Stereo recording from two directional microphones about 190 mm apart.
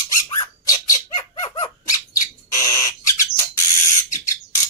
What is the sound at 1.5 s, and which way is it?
Squeak, 25° left (ahead or behind).